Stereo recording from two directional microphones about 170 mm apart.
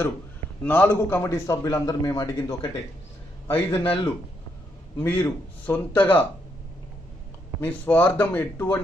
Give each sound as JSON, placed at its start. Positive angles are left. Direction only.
{"t": 0.7, "sound": "a man's voice", "side_deg": 10}
{"t": 4.9, "sound": "a man's voice", "side_deg": 10}
{"t": 7.6, "sound": "a man's voice", "side_deg": 10}